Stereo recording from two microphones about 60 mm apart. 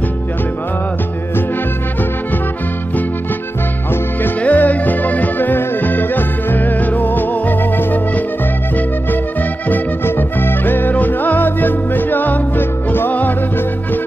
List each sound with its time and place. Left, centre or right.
4.4 s music: left
9.7 s music: left